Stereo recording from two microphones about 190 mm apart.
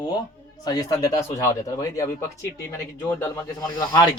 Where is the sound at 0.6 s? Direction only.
20° left (ahead or behind).